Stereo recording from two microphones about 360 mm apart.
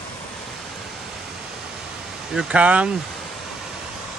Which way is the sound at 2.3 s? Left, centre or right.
Centre.